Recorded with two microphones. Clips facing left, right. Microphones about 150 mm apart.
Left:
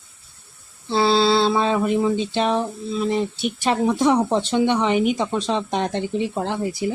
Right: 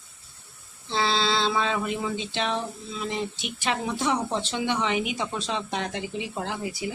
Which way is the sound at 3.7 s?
45° left (ahead or behind).